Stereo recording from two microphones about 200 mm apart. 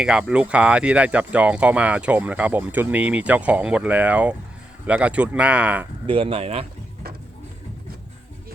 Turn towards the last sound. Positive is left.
turn(degrees=-30)  # may be behind; listen again after turning